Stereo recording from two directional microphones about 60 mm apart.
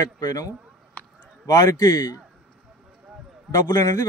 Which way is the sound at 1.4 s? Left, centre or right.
Left.